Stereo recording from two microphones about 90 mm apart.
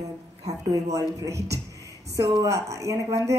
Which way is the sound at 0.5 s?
40° right (ahead or behind).